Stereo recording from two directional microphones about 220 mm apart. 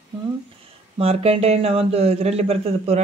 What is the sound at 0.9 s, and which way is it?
Speech, 25° right (ahead or behind).